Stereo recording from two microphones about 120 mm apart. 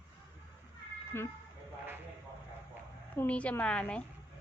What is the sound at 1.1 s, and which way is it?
Speech, 20° left (ahead or behind).